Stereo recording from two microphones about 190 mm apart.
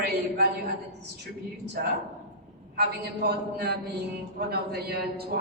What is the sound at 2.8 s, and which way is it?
A man's voice, 60° right (ahead or behind).